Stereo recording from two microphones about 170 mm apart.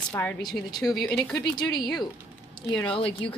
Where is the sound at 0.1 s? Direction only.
10° left (ahead or behind).